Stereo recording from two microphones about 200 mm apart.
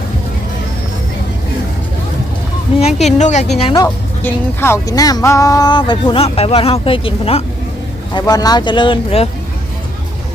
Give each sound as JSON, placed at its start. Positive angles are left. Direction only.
{"t": 3.2, "sound": "a woman's voice", "side_deg": 35}
{"t": 3.8, "sound": "speech", "side_deg": 10}